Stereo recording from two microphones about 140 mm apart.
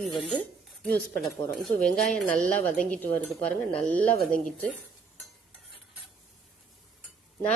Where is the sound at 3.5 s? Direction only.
10° left (ahead or behind).